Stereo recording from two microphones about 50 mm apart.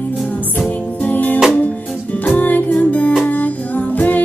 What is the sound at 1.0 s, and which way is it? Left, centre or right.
Music, left.